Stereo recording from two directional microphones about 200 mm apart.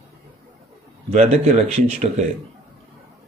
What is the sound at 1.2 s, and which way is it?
Speech, 30° right (ahead or behind).